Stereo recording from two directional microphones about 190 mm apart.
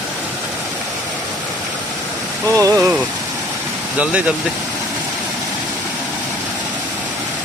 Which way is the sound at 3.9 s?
5° right (ahead or behind).